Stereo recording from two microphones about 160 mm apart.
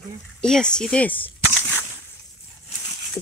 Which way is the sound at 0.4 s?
5° left (ahead or behind).